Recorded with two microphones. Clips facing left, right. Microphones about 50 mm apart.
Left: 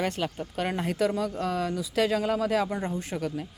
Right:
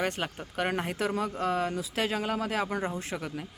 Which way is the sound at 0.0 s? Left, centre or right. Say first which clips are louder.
Left 2 dB; right.